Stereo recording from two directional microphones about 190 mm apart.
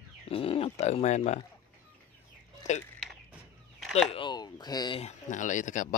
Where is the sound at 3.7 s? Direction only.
Centre (ahead or behind).